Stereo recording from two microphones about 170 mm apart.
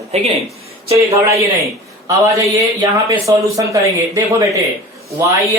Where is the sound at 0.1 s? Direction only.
35° right (ahead or behind).